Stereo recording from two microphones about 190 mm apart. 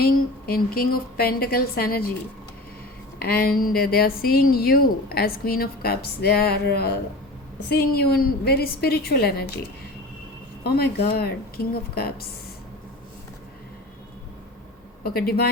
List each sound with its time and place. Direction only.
0.0 s a woman's voice: 55° left (ahead or behind)
3.2 s a woman's voice: 55° left (ahead or behind)
10.6 s a woman's voice: 55° left (ahead or behind)
15.0 s a woman's voice: 55° left (ahead or behind)